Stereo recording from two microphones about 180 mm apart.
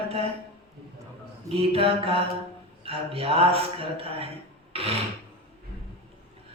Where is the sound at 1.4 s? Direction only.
30° right (ahead or behind).